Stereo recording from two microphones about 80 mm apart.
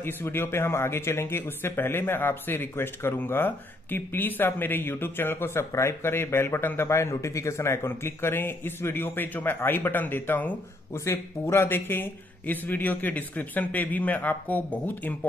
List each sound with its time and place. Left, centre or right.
0.0 s speech: left
10.9 s speech: left